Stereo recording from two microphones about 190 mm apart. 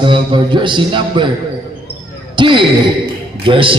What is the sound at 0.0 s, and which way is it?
A man's voice, 25° right (ahead or behind).